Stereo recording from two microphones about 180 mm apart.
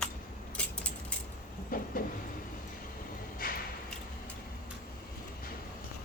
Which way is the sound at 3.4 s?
55° left (ahead or behind).